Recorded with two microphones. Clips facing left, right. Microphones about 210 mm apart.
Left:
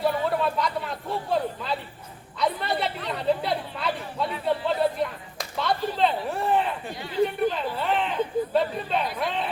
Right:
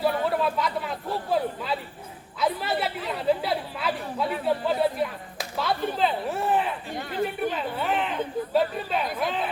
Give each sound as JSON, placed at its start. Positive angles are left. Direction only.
{"t": 0.0, "sound": "speech", "side_deg": 0}
{"t": 2.4, "sound": "chatter", "side_deg": -5}
{"t": 6.9, "sound": "chatter", "side_deg": -50}
{"t": 7.5, "sound": "a sound", "side_deg": -5}
{"t": 8.5, "sound": "chatter", "side_deg": -5}
{"t": 9.1, "sound": "a sound", "side_deg": 0}